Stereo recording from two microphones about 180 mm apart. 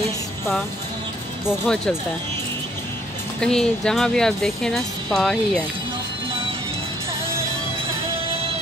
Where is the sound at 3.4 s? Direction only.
5° left (ahead or behind).